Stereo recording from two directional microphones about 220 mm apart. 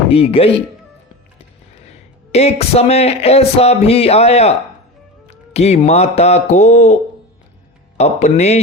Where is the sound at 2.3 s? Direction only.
30° left (ahead or behind).